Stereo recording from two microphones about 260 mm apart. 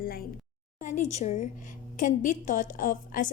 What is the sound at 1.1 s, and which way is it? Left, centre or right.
A woman's voice, left.